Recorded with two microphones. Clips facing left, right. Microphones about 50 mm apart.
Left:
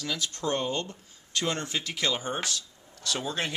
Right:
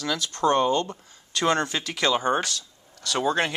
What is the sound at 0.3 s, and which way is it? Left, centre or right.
Speech, right.